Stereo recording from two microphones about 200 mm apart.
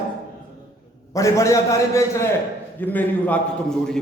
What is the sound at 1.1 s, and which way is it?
A man's voice, 15° left (ahead or behind).